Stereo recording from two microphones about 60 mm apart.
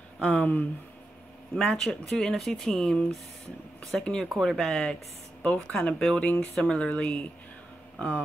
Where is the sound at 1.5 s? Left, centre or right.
Centre.